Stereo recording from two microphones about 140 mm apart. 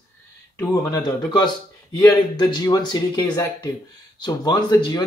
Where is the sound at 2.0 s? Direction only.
30° left (ahead or behind).